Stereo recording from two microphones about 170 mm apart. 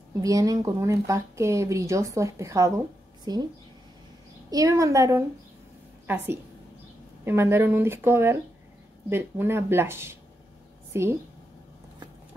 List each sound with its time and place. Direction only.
0.2 s a woman's voice: 20° right (ahead or behind)
4.5 s a woman's voice: 20° right (ahead or behind)